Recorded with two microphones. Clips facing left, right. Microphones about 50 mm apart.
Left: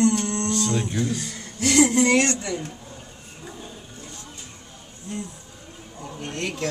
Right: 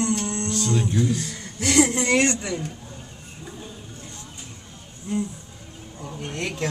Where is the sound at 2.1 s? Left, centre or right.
Centre.